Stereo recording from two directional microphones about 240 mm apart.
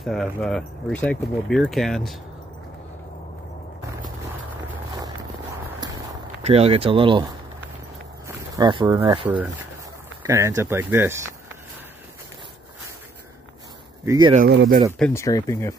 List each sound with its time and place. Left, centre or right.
0.0 s speech: centre
6.4 s speech: right
8.3 s speech: centre
14.0 s speech: centre
14.3 s speech: right
15.0 s speech: centre